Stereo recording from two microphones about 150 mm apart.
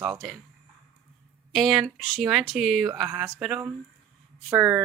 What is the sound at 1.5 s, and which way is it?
Speech, centre (ahead or behind).